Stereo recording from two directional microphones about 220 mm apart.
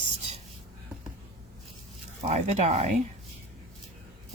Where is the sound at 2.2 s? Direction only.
30° right (ahead or behind).